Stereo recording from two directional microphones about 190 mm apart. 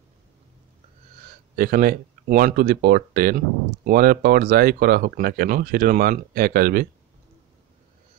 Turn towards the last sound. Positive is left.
turn(degrees=-50)  # may be behind; listen again after turning